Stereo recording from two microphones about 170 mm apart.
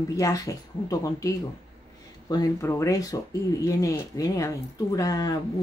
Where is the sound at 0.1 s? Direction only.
20° left (ahead or behind).